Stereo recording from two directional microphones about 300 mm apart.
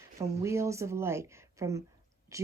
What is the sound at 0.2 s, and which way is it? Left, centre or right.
Speech, centre.